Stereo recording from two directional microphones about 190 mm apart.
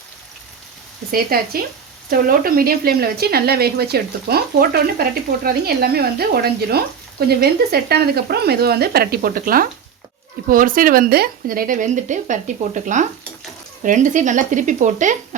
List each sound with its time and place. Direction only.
1.1 s speech: 50° right (ahead or behind)